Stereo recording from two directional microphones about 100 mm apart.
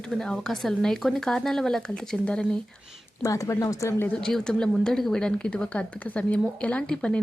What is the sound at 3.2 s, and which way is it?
Speech, 35° left (ahead or behind).